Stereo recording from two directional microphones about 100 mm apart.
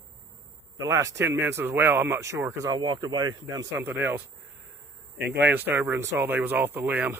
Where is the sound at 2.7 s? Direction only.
50° right (ahead or behind).